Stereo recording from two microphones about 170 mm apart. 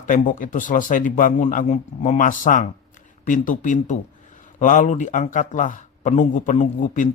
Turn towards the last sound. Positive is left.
turn(degrees=45)  # may be behind; listen again after turning